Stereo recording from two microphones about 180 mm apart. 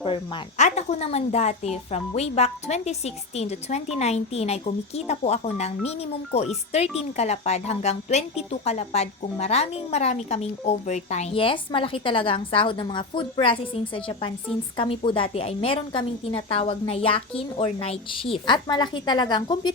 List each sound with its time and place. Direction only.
0.0 s a woman's voice: 35° left (ahead or behind)